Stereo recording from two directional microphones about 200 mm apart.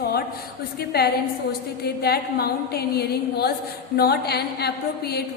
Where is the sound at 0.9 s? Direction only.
50° left (ahead or behind).